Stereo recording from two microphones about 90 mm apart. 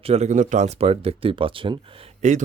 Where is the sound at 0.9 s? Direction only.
90° right.